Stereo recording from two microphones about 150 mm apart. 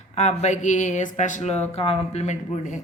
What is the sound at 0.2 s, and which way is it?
Speech, 50° left (ahead or behind).